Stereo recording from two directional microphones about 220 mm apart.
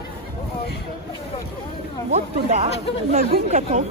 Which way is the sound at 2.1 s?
30° right (ahead or behind).